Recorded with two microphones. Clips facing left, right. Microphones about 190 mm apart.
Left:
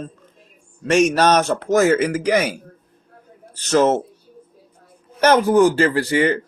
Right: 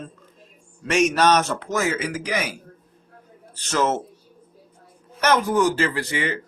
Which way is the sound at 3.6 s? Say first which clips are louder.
Left 7 dB; 40° left (ahead or behind).